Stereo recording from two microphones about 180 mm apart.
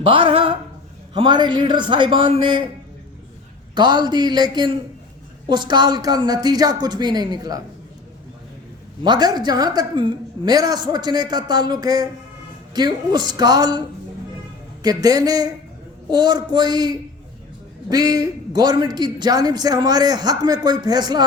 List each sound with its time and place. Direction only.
0.0 s a man's voice: 30° right (ahead or behind)
3.8 s a man's voice: 25° right (ahead or behind)
9.0 s a man's voice: 25° right (ahead or behind)